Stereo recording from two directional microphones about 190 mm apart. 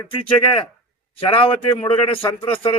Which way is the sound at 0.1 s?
25° left (ahead or behind).